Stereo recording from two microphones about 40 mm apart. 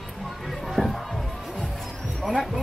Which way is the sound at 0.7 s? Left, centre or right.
Centre.